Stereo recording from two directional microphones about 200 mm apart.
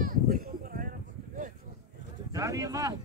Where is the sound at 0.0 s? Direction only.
45° right (ahead or behind).